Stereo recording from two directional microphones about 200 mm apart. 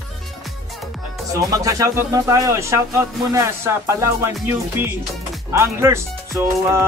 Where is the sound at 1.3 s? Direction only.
15° right (ahead or behind).